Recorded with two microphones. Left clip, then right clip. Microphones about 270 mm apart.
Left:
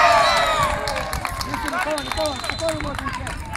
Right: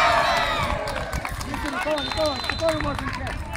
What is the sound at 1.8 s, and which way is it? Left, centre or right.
Speech, centre.